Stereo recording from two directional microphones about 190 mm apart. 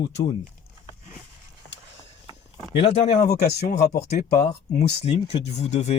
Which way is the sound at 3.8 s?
55° left (ahead or behind).